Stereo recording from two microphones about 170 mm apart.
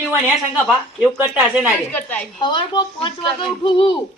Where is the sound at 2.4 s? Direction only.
25° left (ahead or behind).